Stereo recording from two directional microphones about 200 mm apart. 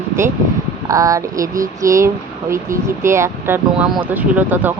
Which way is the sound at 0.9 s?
15° right (ahead or behind).